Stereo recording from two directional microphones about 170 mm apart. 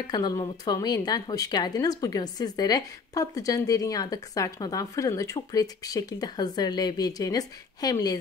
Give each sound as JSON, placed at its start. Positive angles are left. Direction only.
{"t": 0.0, "sound": "speech", "side_deg": 25}